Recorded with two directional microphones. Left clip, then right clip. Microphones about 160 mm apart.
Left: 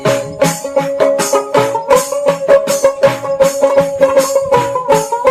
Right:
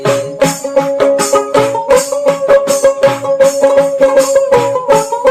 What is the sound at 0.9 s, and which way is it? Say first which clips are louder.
Music: even; 30° right (ahead or behind).